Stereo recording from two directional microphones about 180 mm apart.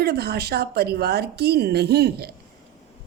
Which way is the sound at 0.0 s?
65° right (ahead or behind).